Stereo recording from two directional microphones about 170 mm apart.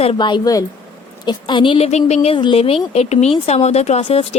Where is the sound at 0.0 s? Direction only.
30° left (ahead or behind).